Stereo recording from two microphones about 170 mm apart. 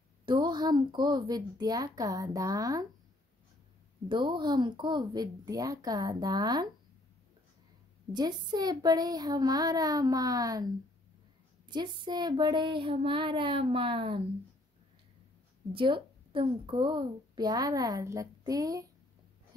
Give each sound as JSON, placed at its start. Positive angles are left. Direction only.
{"t": 0.2, "sound": "a woman's voice", "side_deg": -25}
{"t": 4.1, "sound": "a woman's voice", "side_deg": -30}
{"t": 8.1, "sound": "a woman's voice", "side_deg": -25}
{"t": 11.7, "sound": "a woman's voice", "side_deg": -25}
{"t": 15.7, "sound": "a woman's voice", "side_deg": -30}